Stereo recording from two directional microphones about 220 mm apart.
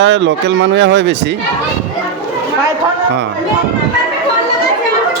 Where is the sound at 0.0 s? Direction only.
55° right (ahead or behind).